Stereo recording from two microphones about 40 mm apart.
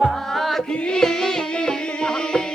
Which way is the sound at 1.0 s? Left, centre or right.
Centre.